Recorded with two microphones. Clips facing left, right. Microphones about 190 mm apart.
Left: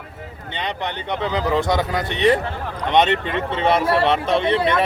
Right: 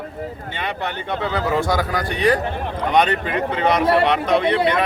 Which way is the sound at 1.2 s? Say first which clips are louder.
Left 1 dB; 20° left (ahead or behind).